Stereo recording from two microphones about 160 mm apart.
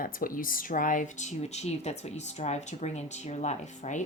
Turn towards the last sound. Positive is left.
turn(degrees=50)  # may be behind; listen again after turning